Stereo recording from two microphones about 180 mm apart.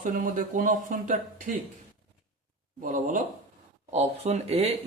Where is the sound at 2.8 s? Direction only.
45° right (ahead or behind).